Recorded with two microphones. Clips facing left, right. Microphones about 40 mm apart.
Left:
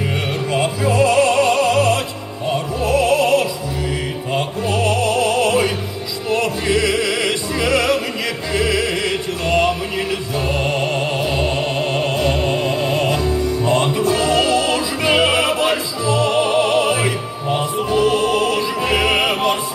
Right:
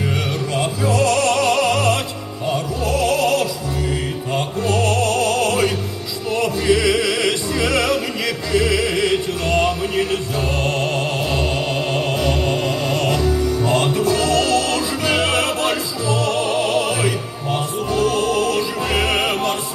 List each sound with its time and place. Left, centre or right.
0.5 s opera: left
4.4 s music: left
6.3 s opera: left
8.5 s music: left; by 12.2 s centre
12.2 s music: left
15.1 s opera: left
17.8 s music: left